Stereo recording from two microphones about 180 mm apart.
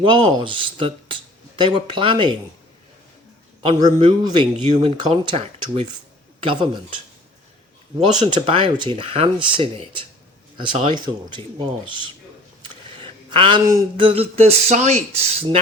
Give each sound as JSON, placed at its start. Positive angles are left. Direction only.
{"t": 0.0, "sound": "speech", "side_deg": -30}
{"t": 3.6, "sound": "speech", "side_deg": -25}
{"t": 12.6, "sound": "a sound", "side_deg": -30}
{"t": 14.0, "sound": "speech", "side_deg": -30}